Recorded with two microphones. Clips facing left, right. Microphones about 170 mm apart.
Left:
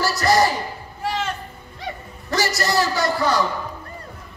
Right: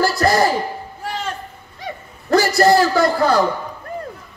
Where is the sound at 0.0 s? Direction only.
50° right (ahead or behind).